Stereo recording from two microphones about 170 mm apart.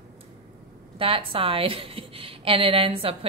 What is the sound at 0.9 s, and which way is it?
A woman's voice, 30° right (ahead or behind).